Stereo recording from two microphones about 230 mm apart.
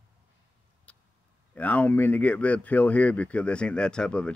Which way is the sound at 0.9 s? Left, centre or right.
Centre.